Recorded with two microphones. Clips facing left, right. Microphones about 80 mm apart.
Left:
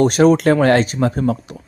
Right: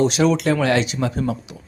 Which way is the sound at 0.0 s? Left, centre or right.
Left.